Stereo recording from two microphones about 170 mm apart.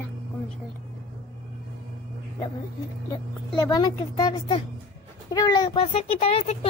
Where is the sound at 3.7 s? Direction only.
25° left (ahead or behind).